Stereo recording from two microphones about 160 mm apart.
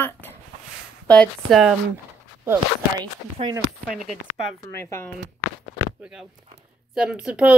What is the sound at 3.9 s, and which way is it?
Speech, 5° right (ahead or behind).